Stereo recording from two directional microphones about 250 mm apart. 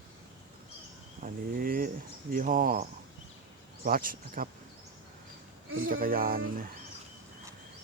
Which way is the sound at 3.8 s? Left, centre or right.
Right.